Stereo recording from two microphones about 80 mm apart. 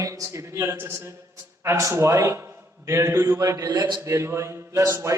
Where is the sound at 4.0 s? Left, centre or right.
Right.